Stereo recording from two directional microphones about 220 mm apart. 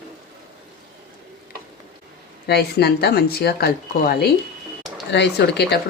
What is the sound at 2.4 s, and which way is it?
Speech, 45° left (ahead or behind).